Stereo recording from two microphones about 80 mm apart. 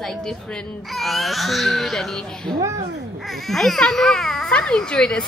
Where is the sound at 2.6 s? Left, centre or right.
Right.